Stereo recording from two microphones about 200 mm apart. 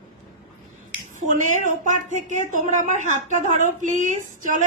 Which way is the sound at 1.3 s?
40° right (ahead or behind).